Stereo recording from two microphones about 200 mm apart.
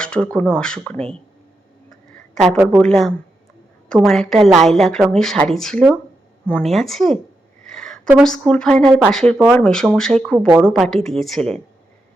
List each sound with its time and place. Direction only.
0.0 s speech: 5° left (ahead or behind)
2.3 s speech: centre (ahead or behind)
7.7 s a sound: centre (ahead or behind)
8.2 s speech: 5° left (ahead or behind)